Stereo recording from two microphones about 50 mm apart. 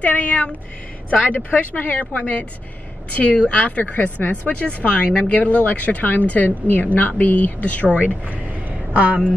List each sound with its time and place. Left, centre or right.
0.0 s speech: left
7.9 s a woman's voice: right